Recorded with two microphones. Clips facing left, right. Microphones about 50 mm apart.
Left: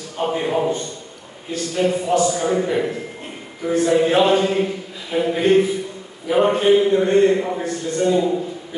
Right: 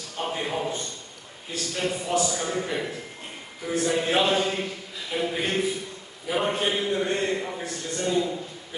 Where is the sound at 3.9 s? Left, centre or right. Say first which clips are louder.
Left 9 dB; centre.